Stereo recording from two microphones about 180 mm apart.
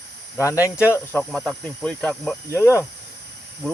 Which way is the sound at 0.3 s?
15° left (ahead or behind).